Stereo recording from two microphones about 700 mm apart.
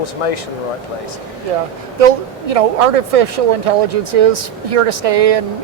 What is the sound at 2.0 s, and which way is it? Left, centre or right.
Speech, right.